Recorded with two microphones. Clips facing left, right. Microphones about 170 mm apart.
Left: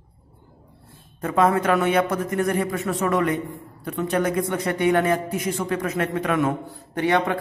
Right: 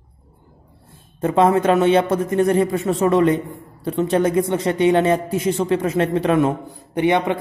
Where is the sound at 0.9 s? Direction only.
25° right (ahead or behind).